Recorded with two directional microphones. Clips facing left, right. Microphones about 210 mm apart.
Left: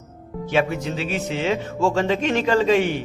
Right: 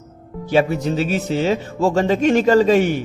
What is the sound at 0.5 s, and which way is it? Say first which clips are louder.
A man's voice: right 5 dB; 40° right (ahead or behind).